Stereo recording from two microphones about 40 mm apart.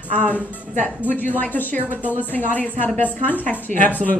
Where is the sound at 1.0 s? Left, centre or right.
Left.